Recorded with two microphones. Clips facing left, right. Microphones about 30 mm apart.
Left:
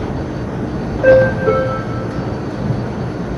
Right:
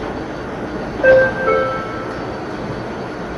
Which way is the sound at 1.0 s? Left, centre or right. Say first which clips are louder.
Left 1 dB; centre.